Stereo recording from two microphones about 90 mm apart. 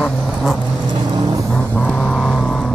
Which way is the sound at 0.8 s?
45° right (ahead or behind).